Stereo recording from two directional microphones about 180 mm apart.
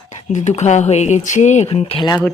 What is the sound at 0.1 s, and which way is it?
Speech, 40° left (ahead or behind).